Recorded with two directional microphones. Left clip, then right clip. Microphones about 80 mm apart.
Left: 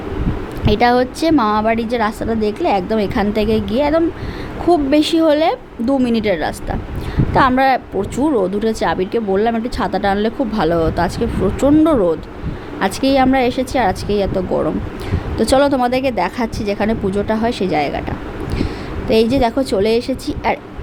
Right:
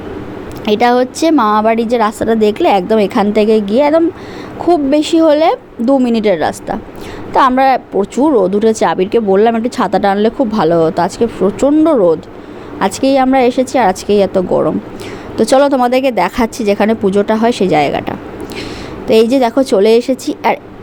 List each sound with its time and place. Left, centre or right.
0.6 s a woman's voice: right
4.6 s a woman's voice: right
7.9 s a woman's voice: centre
11.4 s speech: centre
12.8 s a woman's voice: right